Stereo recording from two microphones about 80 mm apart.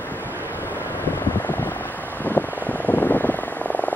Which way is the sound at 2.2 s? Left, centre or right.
Left.